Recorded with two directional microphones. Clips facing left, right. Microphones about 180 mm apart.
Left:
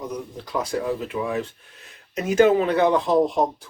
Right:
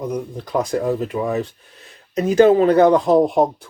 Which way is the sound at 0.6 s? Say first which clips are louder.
Right 5 dB; 45° right (ahead or behind).